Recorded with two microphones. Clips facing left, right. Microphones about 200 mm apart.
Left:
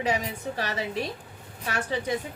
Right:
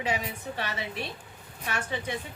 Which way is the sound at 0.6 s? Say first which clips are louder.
Left 5 dB; 40° left (ahead or behind).